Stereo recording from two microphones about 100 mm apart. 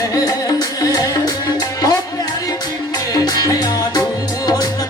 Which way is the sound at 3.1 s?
40° left (ahead or behind).